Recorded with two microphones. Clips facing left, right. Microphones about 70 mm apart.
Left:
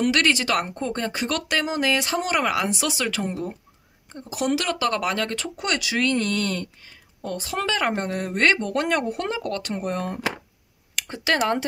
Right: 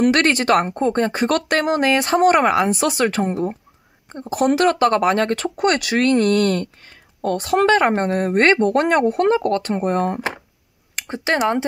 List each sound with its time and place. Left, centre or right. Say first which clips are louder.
0.0 s speech: right 5 dB; right